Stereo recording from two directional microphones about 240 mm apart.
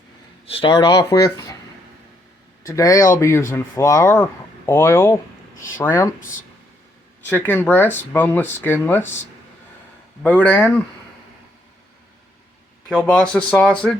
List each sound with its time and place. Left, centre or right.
0.4 s speech: left
2.6 s speech: centre
7.3 s speech: centre
10.2 s speech: centre
12.9 s speech: centre